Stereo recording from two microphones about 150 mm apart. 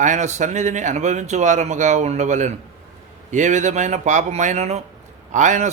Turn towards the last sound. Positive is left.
turn(degrees=-55)  # may be behind; listen again after turning